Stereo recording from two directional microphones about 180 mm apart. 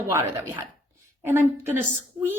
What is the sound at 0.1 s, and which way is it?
A woman's voice, 15° right (ahead or behind).